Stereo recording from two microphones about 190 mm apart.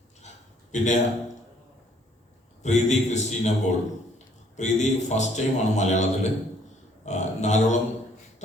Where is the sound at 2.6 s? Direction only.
35° left (ahead or behind).